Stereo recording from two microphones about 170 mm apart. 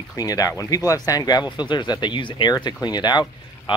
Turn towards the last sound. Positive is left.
turn(degrees=25)  # may be behind; listen again after turning